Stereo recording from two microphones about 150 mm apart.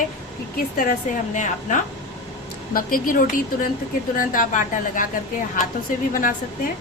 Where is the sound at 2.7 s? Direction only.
70° left (ahead or behind).